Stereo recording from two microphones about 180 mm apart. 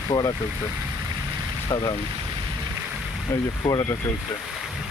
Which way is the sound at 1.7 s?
15° left (ahead or behind).